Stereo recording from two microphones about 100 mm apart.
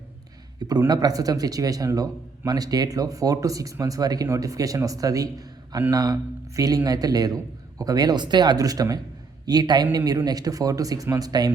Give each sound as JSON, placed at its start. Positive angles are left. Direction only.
{"t": 0.9, "sound": "a man's voice", "side_deg": -40}